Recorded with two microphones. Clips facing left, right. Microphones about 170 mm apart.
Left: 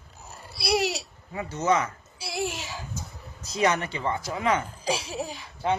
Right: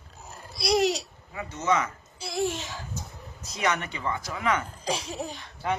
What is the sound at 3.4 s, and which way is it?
Speech, 30° left (ahead or behind).